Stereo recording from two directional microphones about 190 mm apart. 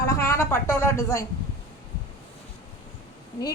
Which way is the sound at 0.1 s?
15° left (ahead or behind).